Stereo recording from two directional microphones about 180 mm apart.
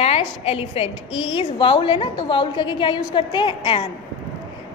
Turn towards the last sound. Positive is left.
turn(degrees=25)  # may be behind; listen again after turning